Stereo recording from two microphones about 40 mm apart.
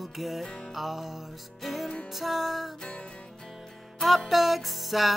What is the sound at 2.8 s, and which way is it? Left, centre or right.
Music, left.